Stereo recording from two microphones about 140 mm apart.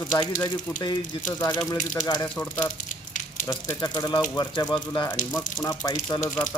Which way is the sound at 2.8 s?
70° left (ahead or behind).